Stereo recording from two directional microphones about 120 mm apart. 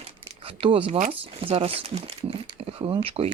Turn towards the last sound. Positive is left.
turn(degrees=-55)  # may be behind; listen again after turning